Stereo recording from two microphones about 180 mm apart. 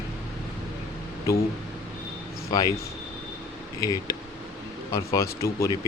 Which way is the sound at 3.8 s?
20° left (ahead or behind).